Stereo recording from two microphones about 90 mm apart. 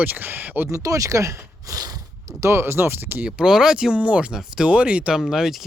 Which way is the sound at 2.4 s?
30° right (ahead or behind).